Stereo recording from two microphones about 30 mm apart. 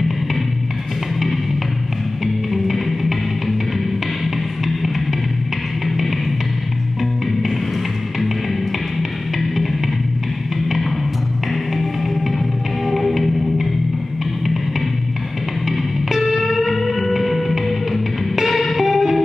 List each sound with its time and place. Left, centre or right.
2.5 s music: centre
11.7 s music: centre
15.7 s music: centre